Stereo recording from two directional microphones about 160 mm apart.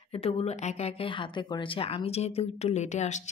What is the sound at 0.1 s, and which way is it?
Speech, 35° left (ahead or behind).